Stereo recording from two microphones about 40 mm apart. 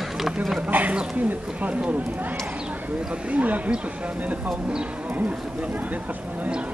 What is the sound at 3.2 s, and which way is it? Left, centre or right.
Speech, right.